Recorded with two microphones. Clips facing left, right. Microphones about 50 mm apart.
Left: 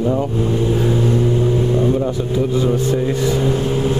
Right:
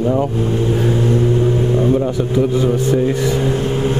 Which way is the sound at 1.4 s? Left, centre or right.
Right.